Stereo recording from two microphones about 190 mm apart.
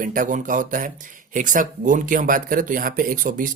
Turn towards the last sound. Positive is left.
turn(degrees=-45)  # may be behind; listen again after turning